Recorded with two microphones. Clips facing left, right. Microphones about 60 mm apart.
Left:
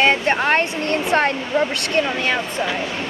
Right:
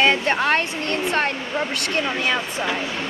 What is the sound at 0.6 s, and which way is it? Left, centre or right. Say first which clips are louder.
Speech: left 3 dB; left.